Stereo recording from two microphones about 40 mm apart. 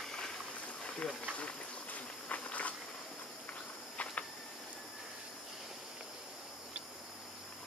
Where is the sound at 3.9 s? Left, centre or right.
Left.